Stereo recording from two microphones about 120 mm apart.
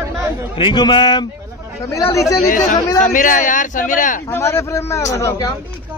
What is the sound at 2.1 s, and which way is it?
Speech, 25° left (ahead or behind).